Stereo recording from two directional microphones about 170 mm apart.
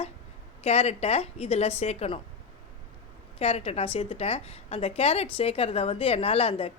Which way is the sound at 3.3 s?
35° left (ahead or behind).